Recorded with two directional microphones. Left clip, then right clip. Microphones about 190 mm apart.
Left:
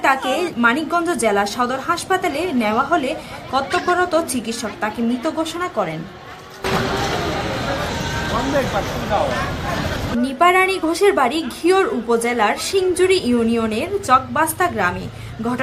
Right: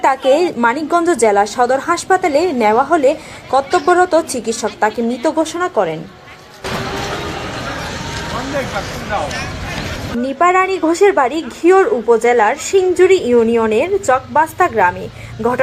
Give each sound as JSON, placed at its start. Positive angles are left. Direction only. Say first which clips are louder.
{"t": 0.0, "sound": "a woman's voice", "louder": "right 5 dB", "side_deg": -20}
{"t": 10.3, "sound": "a woman's voice", "louder": "right 2 dB", "side_deg": -5}